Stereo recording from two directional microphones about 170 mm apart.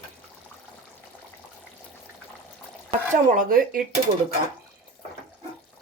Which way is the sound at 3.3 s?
55° right (ahead or behind).